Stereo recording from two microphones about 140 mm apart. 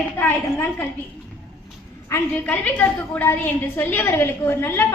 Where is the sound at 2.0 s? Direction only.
15° left (ahead or behind).